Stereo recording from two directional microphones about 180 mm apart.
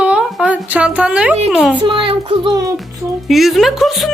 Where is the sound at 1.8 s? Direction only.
30° right (ahead or behind).